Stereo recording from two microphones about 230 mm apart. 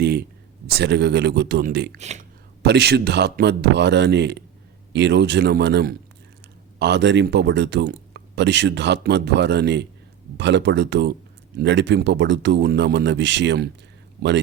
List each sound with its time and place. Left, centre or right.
0.0 s a sound: right
0.7 s speech: right
2.0 s speech: right
2.6 s speech: right